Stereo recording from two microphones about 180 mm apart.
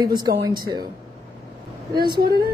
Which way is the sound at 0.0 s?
25° right (ahead or behind).